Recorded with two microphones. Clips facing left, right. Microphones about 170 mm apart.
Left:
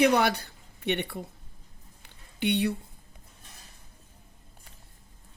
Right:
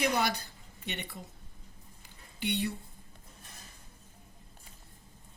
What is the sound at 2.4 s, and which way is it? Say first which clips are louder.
Speech: left 7 dB; 65° left (ahead or behind).